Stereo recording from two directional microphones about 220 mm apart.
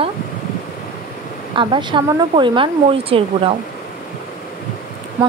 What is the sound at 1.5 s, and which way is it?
Speech, 20° right (ahead or behind).